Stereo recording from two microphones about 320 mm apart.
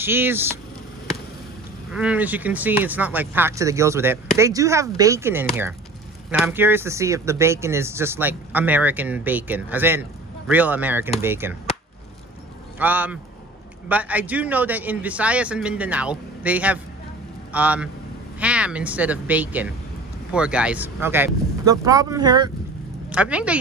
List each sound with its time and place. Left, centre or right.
0.0 s speech: centre
1.9 s speech: centre
12.7 s a man's voice: centre